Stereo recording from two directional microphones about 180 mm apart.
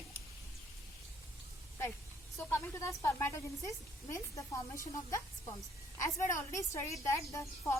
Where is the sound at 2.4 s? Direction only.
15° left (ahead or behind).